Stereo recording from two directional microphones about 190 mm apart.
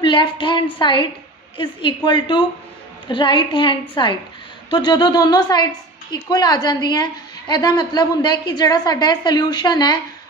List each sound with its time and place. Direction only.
0.0 s a woman's voice: 25° left (ahead or behind)